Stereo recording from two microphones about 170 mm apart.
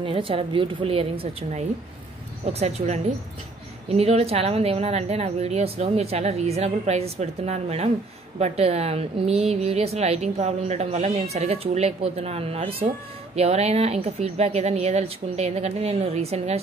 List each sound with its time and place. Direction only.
0.0 s a woman's voice: 30° right (ahead or behind)
3.9 s a woman's voice: 35° right (ahead or behind)